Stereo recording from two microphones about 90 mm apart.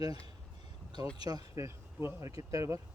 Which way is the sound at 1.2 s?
45° right (ahead or behind).